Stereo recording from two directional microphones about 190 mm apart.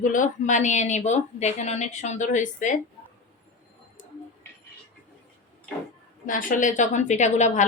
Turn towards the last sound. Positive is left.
turn(degrees=40)  # may be behind; listen again after turning